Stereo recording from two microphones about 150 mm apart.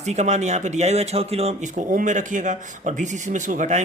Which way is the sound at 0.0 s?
50° right (ahead or behind).